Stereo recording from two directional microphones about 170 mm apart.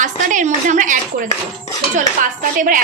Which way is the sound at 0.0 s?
50° right (ahead or behind).